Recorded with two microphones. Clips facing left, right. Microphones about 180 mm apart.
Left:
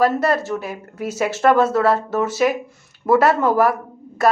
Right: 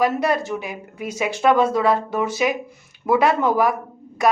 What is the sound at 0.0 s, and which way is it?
Speech, 15° right (ahead or behind).